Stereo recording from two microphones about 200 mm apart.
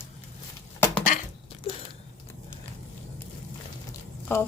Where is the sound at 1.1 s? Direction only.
40° left (ahead or behind).